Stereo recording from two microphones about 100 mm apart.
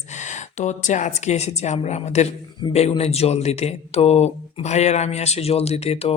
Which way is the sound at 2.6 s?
50° left (ahead or behind).